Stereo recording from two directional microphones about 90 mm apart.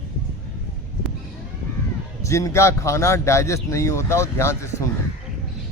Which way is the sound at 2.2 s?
35° left (ahead or behind).